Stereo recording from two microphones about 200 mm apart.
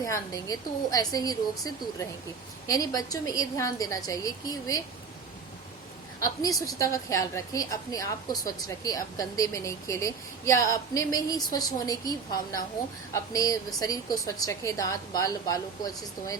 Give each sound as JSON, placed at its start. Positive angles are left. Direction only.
{"t": 0.0, "sound": "a woman's voice", "side_deg": 15}
{"t": 6.2, "sound": "a woman's voice", "side_deg": 20}